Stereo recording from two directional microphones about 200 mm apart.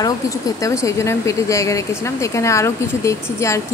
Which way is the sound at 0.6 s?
15° left (ahead or behind).